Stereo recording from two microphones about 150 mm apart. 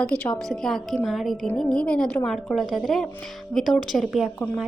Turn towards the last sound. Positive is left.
turn(degrees=-5)  # may be behind; listen again after turning